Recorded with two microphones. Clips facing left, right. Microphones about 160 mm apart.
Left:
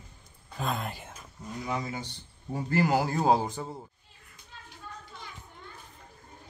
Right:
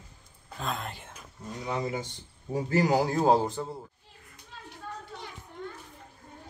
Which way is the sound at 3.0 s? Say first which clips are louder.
Right 2 dB; 5° left (ahead or behind).